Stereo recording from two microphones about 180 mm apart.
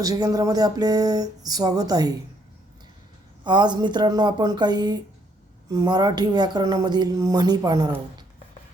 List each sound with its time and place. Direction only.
0.0 s speech: 20° right (ahead or behind)
3.4 s speech: 25° right (ahead or behind)